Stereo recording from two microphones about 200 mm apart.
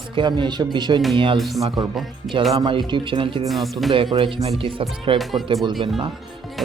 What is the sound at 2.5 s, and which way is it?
Speech, 25° right (ahead or behind).